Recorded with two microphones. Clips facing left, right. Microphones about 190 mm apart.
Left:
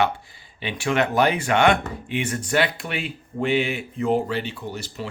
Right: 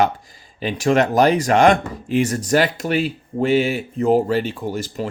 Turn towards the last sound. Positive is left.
turn(degrees=-45)  # may be behind; listen again after turning